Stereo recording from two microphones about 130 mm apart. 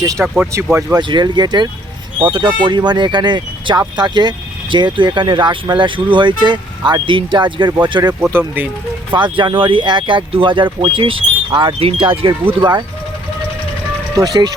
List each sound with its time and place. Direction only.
0.0 s speech: 25° right (ahead or behind)
0.9 s speech: 35° right (ahead or behind)
8.3 s speech: 15° right (ahead or behind)
9.1 s speech: 35° right (ahead or behind)
14.2 s speech: 30° right (ahead or behind)